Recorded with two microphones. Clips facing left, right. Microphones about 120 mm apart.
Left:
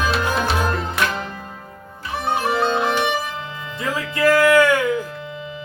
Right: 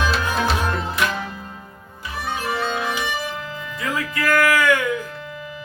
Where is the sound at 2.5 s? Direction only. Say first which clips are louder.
Left 4 dB; 25° left (ahead or behind).